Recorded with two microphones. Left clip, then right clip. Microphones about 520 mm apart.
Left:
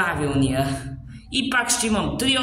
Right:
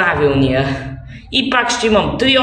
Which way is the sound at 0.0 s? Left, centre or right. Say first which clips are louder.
Right 9 dB; left.